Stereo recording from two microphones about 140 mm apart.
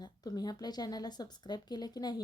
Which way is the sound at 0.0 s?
30° left (ahead or behind).